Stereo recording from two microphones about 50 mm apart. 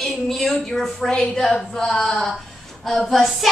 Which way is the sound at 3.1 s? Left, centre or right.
Centre.